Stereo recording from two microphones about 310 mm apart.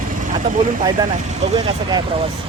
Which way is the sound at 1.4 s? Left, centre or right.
Centre.